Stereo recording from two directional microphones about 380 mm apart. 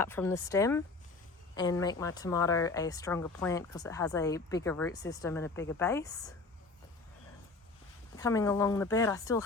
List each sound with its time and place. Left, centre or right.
0.0 s speech: centre
8.1 s speech: centre